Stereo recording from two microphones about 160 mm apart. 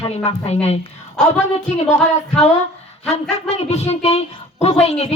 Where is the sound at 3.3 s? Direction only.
40° left (ahead or behind).